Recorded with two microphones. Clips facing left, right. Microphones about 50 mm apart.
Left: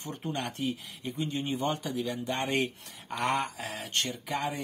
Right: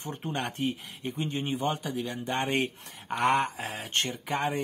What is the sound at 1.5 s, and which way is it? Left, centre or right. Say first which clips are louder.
Speech: right 1 dB; centre.